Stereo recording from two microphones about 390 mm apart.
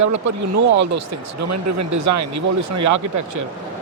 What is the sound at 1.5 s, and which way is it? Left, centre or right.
Speech, right.